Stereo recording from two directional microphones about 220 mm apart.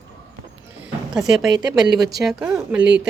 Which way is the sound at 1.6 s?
15° right (ahead or behind).